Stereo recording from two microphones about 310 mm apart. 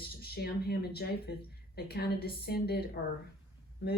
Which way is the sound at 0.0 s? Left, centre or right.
Left.